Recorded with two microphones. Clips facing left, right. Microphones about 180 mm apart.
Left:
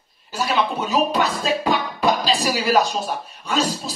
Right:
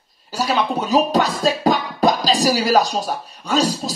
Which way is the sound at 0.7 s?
40° right (ahead or behind).